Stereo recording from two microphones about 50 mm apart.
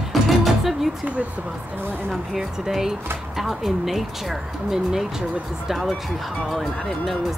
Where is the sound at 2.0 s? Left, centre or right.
Centre.